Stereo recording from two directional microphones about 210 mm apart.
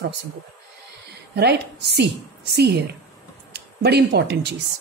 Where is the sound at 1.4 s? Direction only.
50° right (ahead or behind).